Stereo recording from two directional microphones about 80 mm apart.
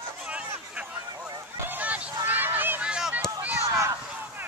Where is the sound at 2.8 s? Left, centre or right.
Centre.